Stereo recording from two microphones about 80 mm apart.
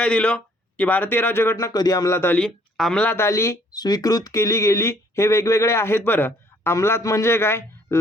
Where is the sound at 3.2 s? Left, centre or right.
Left.